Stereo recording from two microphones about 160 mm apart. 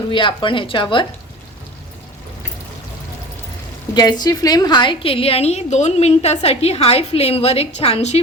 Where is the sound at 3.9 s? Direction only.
25° left (ahead or behind); by 8.2 s 40° left (ahead or behind).